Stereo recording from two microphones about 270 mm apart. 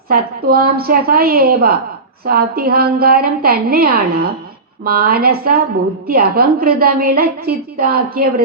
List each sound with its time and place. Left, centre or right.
0.1 s a woman's voice: right